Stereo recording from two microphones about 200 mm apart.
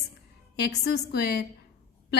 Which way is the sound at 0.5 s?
55° left (ahead or behind).